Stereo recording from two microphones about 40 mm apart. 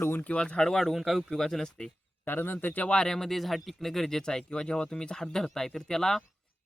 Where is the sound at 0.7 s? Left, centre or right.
Centre.